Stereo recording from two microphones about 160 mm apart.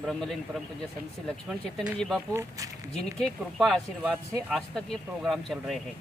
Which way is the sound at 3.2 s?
Centre (ahead or behind).